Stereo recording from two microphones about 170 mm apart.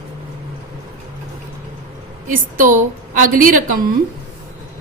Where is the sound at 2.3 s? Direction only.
50° right (ahead or behind).